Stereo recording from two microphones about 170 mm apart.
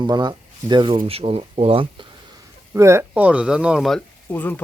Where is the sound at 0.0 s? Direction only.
25° right (ahead or behind).